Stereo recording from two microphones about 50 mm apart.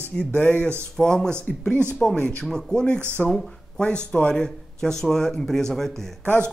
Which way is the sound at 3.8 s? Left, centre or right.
Left.